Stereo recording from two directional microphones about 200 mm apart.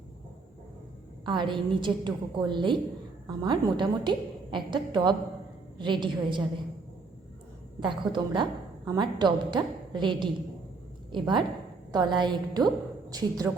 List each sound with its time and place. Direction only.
1.2 s a woman's voice: 25° right (ahead or behind)
7.8 s a woman's voice: 25° right (ahead or behind)